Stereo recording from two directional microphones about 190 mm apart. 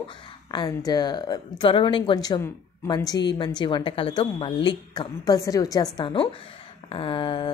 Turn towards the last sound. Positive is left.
turn(degrees=25)  # may be behind; listen again after turning